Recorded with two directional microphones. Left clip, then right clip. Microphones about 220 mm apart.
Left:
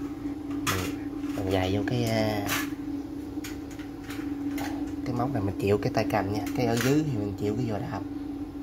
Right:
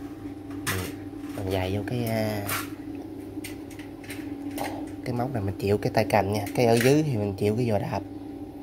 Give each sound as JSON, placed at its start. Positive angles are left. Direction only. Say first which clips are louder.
{"t": 1.5, "sound": "speech", "louder": "left 1 dB", "side_deg": -10}
{"t": 5.0, "sound": "speech", "louder": "even", "side_deg": -20}